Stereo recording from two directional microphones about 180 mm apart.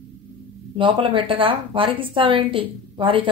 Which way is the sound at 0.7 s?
30° right (ahead or behind).